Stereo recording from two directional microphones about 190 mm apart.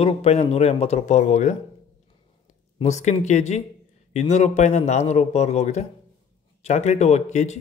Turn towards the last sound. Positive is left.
turn(degrees=35)  # may be behind; listen again after turning